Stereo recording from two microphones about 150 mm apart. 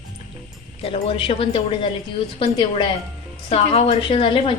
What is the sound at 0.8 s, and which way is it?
A woman's voice, 40° left (ahead or behind).